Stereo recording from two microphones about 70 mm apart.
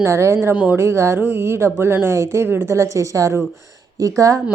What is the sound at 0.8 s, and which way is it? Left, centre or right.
Speech, right.